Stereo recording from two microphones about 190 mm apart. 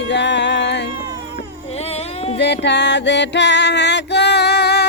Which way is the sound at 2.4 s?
65° left (ahead or behind).